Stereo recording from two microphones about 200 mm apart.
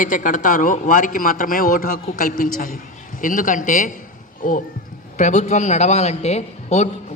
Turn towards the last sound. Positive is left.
turn(degrees=35)  # may be behind; listen again after turning